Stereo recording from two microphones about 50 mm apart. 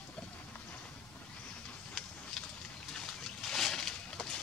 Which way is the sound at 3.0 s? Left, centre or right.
Centre.